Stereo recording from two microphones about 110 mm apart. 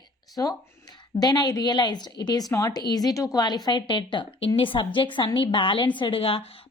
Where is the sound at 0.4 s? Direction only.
30° left (ahead or behind).